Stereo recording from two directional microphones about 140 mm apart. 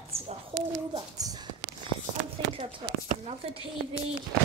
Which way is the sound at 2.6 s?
45° right (ahead or behind).